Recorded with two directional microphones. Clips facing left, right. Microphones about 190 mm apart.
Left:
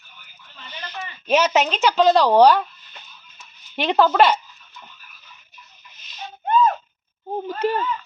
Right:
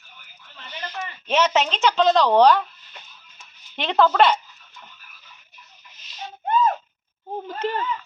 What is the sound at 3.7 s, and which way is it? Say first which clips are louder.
Speech: left 2 dB; 10° left (ahead or behind).